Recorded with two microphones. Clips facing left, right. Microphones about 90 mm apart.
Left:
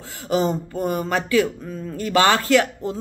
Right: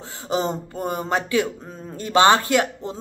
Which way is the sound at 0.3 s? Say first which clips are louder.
Left 3 dB; 25° right (ahead or behind).